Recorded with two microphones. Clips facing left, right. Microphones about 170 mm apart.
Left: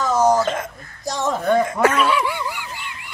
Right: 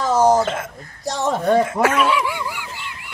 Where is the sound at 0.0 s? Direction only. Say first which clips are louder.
Right 1 dB; 30° right (ahead or behind).